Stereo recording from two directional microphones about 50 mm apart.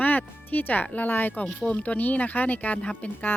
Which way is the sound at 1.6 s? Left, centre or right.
Left.